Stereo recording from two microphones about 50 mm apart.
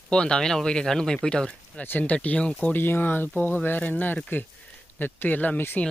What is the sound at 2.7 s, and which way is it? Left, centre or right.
Speech, left.